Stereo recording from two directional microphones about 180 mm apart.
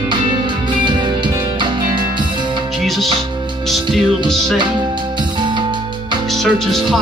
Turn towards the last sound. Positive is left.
turn(degrees=0)  # may be behind; listen again after turning